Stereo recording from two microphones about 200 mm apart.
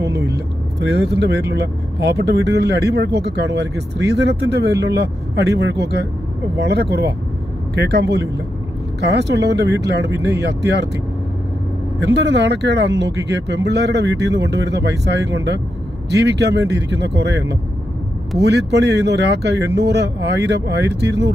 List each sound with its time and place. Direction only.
0.7 s speech: 55° right (ahead or behind)
12.0 s speech: 60° right (ahead or behind)